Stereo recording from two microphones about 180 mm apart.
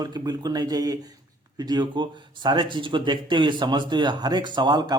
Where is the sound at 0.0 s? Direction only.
20° right (ahead or behind).